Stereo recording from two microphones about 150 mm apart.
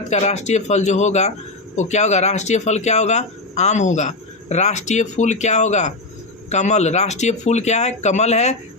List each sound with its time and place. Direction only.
0.1 s speech: 50° left (ahead or behind)